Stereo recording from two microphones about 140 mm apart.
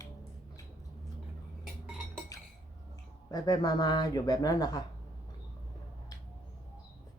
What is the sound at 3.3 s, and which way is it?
Speech, 25° left (ahead or behind).